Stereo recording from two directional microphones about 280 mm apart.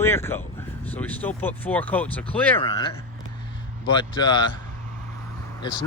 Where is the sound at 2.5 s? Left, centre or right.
Centre.